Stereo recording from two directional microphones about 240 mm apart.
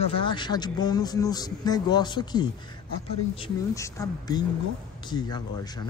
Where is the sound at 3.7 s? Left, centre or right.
Centre.